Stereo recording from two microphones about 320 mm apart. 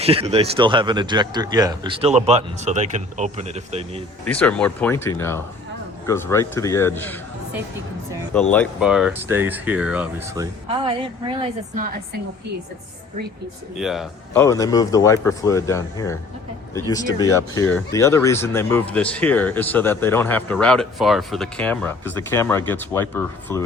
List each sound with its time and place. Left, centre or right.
0.0 s a man's voice: centre
4.3 s speech: centre
8.3 s a man's voice: centre; by 12.2 s right
13.7 s speech: centre
14.4 s speech: centre